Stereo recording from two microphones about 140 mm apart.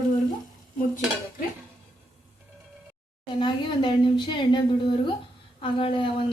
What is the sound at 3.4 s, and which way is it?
A woman's voice, 35° left (ahead or behind).